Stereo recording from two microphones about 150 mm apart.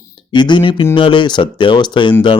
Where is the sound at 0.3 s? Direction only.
30° left (ahead or behind).